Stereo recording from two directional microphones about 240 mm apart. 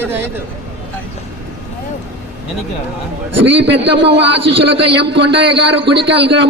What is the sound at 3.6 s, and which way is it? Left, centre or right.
A man's voice, right.